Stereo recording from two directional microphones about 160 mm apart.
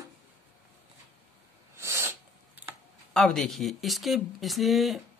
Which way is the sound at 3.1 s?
5° left (ahead or behind).